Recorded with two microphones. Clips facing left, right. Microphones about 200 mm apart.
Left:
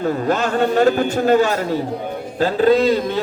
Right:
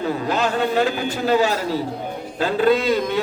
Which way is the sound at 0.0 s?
45° left (ahead or behind).